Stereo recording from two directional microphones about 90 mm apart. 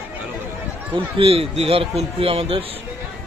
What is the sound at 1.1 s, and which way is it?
Speech, 90° right.